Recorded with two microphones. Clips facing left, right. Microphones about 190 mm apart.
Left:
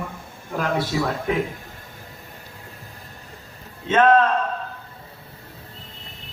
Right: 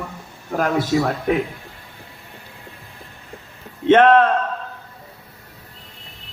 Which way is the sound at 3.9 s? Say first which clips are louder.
Right 4 dB; 60° right (ahead or behind).